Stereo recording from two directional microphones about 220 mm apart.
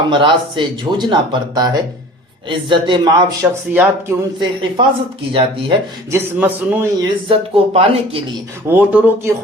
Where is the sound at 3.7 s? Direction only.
5° right (ahead or behind).